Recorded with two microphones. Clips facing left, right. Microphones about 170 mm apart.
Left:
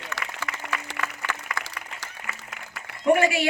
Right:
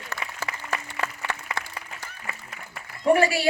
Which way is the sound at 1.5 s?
25° right (ahead or behind).